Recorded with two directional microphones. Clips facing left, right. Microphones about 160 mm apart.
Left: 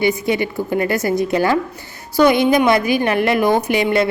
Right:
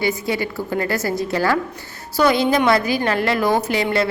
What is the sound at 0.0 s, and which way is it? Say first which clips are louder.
A woman's voice: left 4 dB; 20° left (ahead or behind).